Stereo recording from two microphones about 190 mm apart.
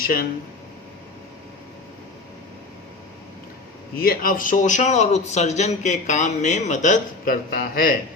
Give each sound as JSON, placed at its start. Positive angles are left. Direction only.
{"t": 3.9, "sound": "a man's voice", "side_deg": 50}